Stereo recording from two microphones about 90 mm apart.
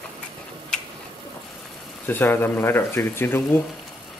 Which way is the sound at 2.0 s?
20° left (ahead or behind).